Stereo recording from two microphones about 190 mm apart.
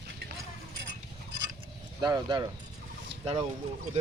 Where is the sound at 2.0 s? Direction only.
20° right (ahead or behind).